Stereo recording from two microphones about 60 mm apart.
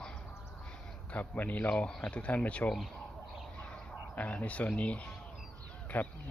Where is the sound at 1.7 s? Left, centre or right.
Centre.